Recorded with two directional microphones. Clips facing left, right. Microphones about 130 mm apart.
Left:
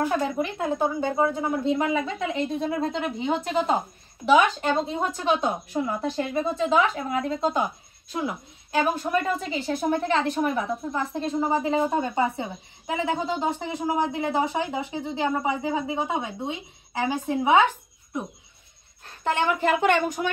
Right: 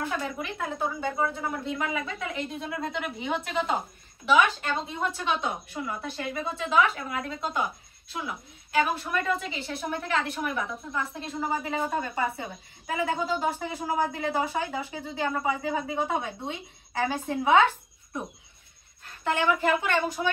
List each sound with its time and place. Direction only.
0.1 s a woman's voice: 35° left (ahead or behind); by 17.6 s 15° left (ahead or behind)
19.8 s speech: 50° left (ahead or behind)